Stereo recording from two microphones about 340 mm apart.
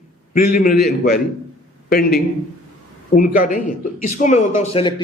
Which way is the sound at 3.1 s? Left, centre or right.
Left.